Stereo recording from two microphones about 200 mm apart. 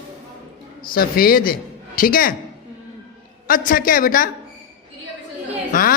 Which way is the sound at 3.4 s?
45° left (ahead or behind).